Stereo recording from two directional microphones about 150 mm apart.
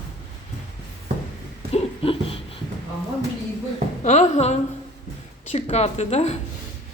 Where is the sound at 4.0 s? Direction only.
50° left (ahead or behind).